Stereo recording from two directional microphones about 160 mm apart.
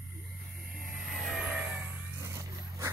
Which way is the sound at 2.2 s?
20° right (ahead or behind).